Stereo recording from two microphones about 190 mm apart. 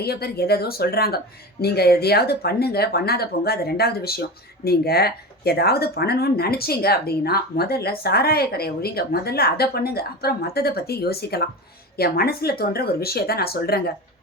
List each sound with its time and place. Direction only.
0.0 s speech: 55° left (ahead or behind)